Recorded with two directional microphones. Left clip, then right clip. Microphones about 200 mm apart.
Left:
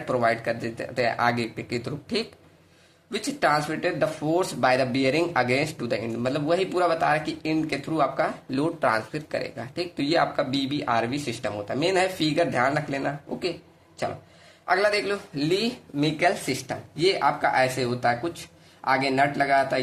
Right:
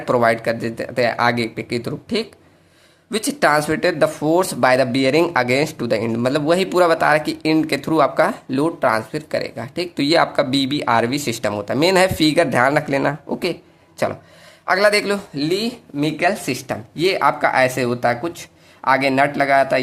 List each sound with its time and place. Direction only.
0.0 s speech: 25° right (ahead or behind)
8.5 s speech: 20° right (ahead or behind)
14.7 s speech: 30° right (ahead or behind)
15.4 s speech: 10° right (ahead or behind)
16.5 s speech: 30° right (ahead or behind)